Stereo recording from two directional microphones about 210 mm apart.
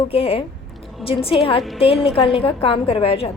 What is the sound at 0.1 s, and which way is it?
A woman's voice, 25° left (ahead or behind).